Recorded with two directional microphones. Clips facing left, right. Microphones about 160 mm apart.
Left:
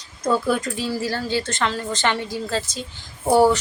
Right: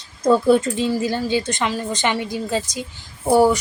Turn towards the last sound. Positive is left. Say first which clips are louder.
# right 1 dB
turn(degrees=-10)  # may be behind; listen again after turning